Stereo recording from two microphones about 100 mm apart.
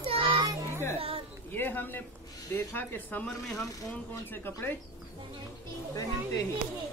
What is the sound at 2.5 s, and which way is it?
Speech, 20° left (ahead or behind).